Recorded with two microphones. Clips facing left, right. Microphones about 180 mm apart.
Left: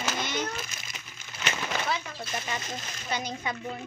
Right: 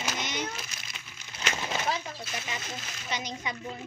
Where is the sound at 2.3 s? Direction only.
45° left (ahead or behind).